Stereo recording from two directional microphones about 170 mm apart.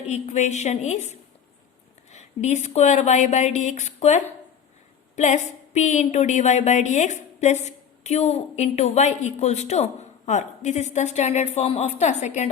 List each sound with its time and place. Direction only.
0.1 s speech: 45° left (ahead or behind)
2.1 s speech: 45° left (ahead or behind)